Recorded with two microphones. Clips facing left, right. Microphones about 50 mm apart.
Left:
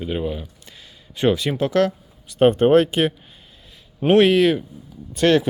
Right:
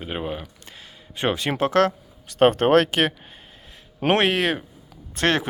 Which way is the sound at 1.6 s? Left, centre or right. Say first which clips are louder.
Even; right.